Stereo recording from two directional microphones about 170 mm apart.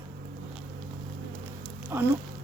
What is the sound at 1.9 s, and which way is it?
Speech, 15° right (ahead or behind).